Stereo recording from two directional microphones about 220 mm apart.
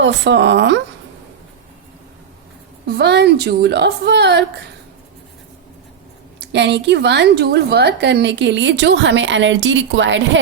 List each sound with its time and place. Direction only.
0.0 s a woman's voice: 55° right (ahead or behind)
2.8 s a woman's voice: 50° right (ahead or behind)
6.4 s a woman's voice: 50° right (ahead or behind)